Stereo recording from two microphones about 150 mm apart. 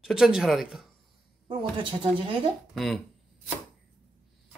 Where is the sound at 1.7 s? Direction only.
35° right (ahead or behind).